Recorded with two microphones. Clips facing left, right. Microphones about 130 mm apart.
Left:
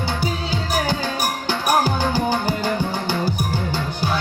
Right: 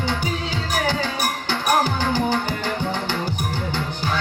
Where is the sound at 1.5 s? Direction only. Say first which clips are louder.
Left 1 dB; 10° left (ahead or behind).